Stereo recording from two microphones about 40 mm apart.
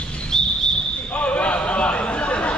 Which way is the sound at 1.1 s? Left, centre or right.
Left.